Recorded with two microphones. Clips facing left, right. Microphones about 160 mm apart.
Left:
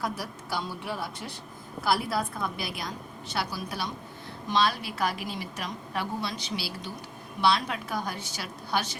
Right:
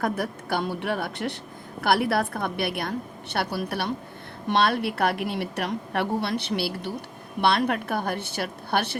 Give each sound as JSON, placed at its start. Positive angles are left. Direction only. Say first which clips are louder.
{"t": 0.0, "sound": "a woman's voice", "louder": "right 6 dB", "side_deg": -60}